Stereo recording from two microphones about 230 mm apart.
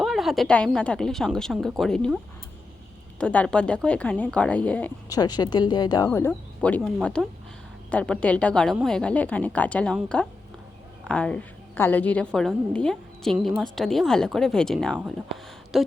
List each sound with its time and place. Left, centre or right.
0.0 s a woman's voice: centre
3.2 s a woman's voice: centre